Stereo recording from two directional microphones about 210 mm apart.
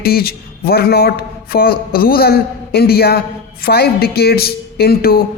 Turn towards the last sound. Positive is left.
turn(degrees=45)  # may be behind; listen again after turning